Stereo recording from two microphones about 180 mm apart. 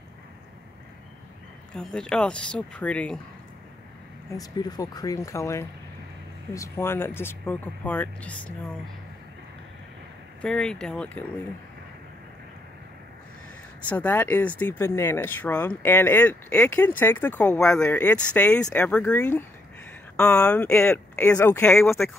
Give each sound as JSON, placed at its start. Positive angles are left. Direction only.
{"t": 1.8, "sound": "speech", "side_deg": 5}
{"t": 4.4, "sound": "speech", "side_deg": 20}
{"t": 10.4, "sound": "speech", "side_deg": 5}
{"t": 13.7, "sound": "speech", "side_deg": 10}